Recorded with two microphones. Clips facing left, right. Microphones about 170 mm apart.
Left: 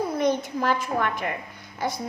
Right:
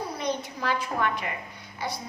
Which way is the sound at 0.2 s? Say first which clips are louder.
Left 7 dB; 50° left (ahead or behind).